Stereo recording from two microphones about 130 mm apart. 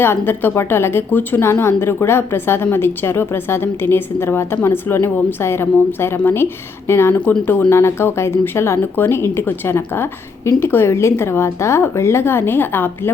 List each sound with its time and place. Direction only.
0.0 s a woman's voice: 15° left (ahead or behind)